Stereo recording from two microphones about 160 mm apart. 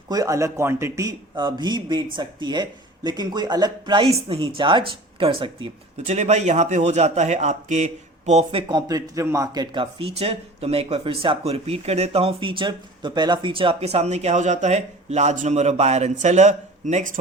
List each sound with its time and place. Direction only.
0.1 s a man's voice: 20° right (ahead or behind)
6.1 s a man's voice: 45° right (ahead or behind)
8.6 s speech: 20° right (ahead or behind); by 17.2 s 50° right (ahead or behind)